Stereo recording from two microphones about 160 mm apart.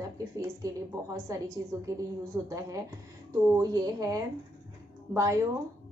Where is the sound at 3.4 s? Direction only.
20° right (ahead or behind).